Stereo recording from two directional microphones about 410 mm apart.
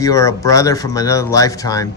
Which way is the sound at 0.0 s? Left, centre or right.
Centre.